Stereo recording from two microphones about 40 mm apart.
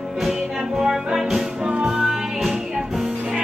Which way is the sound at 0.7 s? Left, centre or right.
Centre.